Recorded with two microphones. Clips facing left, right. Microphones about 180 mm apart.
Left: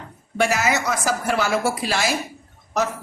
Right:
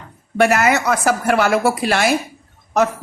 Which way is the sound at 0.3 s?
60° right (ahead or behind).